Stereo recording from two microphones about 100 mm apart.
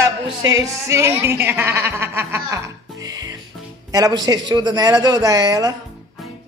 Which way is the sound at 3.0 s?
40° right (ahead or behind).